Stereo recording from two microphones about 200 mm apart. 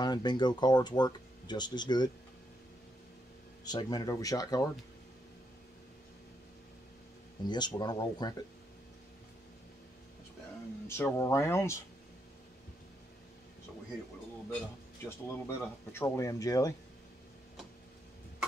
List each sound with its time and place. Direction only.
0.0 s speech: 20° left (ahead or behind)
3.6 s speech: 20° left (ahead or behind)
7.4 s speech: 20° left (ahead or behind)
10.9 s speech: 10° left (ahead or behind)
15.0 s speech: 10° left (ahead or behind)